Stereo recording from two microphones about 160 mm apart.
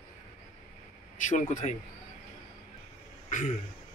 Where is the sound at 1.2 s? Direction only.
50° left (ahead or behind).